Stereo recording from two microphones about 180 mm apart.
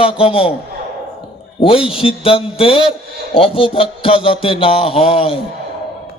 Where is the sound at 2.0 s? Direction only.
30° left (ahead or behind).